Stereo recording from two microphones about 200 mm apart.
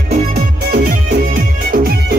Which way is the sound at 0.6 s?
50° right (ahead or behind).